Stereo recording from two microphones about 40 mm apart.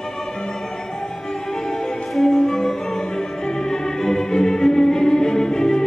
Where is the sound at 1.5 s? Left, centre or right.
Centre.